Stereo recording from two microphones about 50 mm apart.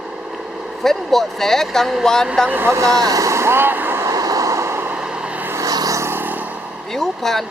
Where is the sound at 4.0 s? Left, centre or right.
Right.